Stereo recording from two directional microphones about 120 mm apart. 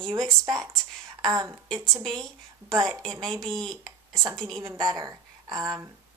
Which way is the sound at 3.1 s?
5° left (ahead or behind).